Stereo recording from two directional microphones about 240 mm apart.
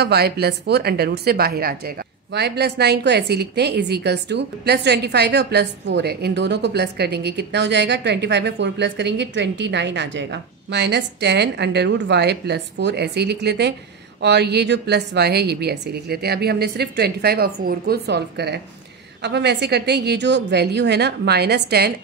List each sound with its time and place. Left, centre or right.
0.0 s a woman's voice: right